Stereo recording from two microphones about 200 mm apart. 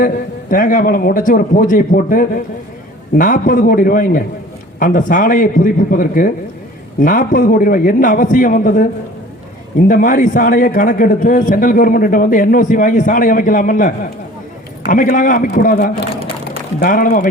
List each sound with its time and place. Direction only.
0.5 s a man's voice: 45° left (ahead or behind)